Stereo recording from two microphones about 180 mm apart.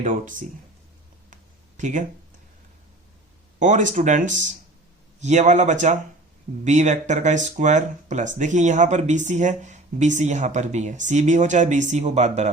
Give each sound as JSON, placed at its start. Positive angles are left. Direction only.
{"t": 0.0, "sound": "speech", "side_deg": -50}
{"t": 1.3, "sound": "a sound", "side_deg": -45}
{"t": 3.6, "sound": "speech", "side_deg": -45}